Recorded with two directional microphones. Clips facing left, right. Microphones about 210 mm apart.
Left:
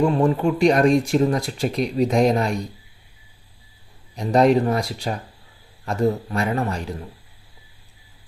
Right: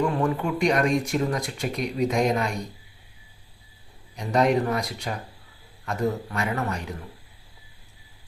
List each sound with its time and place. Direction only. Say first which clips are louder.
0.0 s speech: left 6 dB; 30° left (ahead or behind)
4.2 s speech: left 5 dB; 30° left (ahead or behind)